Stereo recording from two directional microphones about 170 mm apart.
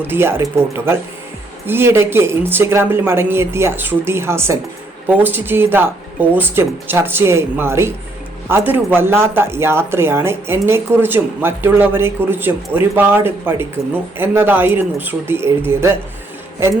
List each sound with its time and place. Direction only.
0.1 s speech: 15° right (ahead or behind)